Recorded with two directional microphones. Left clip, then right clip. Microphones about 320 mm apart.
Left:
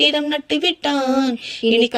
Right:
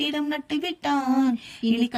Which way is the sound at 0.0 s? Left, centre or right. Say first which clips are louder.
Left 10 dB; centre.